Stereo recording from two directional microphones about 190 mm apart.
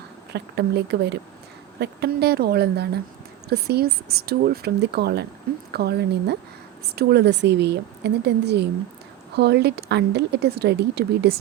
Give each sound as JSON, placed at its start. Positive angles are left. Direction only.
{"t": 0.3, "sound": "speech", "side_deg": -60}